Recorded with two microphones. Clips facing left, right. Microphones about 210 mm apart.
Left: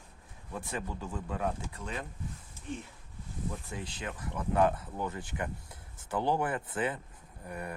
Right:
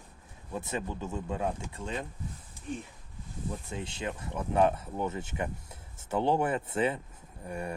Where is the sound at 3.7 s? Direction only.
25° right (ahead or behind).